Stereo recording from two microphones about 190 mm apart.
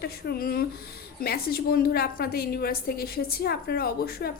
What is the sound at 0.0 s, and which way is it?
A woman's voice, 55° left (ahead or behind).